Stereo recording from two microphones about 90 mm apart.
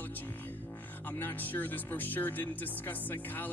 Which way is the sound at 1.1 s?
20° left (ahead or behind).